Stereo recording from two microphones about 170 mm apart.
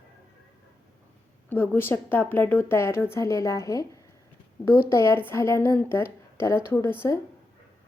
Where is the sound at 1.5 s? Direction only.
10° left (ahead or behind).